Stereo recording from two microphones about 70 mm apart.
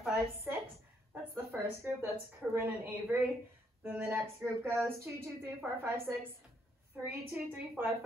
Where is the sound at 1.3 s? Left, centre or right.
Right.